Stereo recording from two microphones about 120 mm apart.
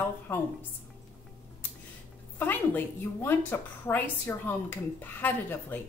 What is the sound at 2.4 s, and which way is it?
A woman's voice, 15° left (ahead or behind).